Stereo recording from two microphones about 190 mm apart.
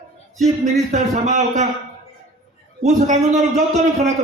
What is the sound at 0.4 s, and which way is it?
Speech, 35° right (ahead or behind).